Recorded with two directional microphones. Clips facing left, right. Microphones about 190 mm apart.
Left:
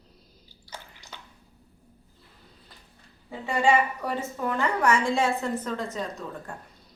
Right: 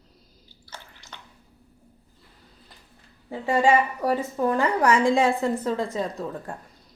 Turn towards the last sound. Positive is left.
turn(degrees=-30)  # may be behind; listen again after turning